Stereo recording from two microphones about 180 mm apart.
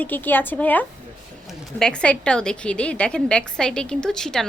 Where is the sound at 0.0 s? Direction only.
10° left (ahead or behind).